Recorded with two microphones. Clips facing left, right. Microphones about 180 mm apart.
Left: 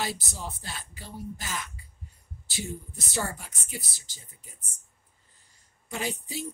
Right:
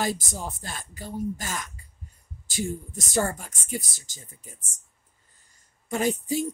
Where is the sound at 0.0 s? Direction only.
50° right (ahead or behind).